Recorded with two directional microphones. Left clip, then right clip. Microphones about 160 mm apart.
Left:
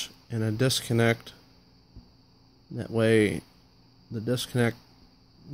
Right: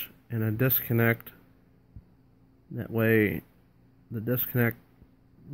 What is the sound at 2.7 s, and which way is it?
Speech, 20° left (ahead or behind).